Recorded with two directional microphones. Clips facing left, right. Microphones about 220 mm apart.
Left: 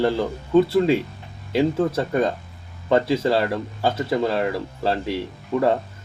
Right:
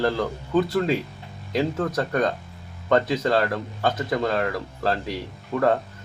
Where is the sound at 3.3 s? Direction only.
5° left (ahead or behind).